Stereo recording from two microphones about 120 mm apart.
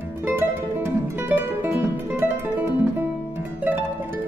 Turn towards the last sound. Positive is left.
turn(degrees=-15)  # may be behind; listen again after turning